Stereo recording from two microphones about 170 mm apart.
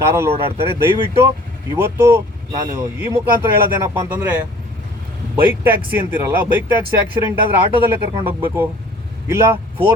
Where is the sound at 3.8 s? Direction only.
10° right (ahead or behind).